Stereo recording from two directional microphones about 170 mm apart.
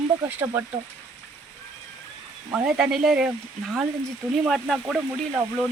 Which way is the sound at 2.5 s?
5° right (ahead or behind).